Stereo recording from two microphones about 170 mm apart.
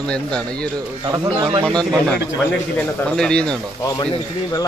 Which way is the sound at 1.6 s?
5° left (ahead or behind).